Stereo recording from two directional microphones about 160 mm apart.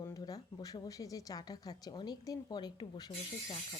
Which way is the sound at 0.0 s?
25° left (ahead or behind).